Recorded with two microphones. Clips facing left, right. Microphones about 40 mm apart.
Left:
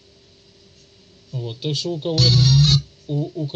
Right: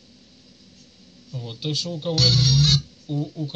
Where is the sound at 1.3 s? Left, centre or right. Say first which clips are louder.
Left 4 dB; left.